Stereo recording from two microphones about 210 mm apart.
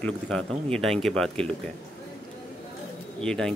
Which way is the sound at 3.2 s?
5° left (ahead or behind).